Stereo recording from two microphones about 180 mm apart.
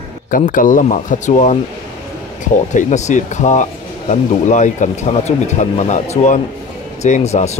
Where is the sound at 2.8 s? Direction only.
40° left (ahead or behind).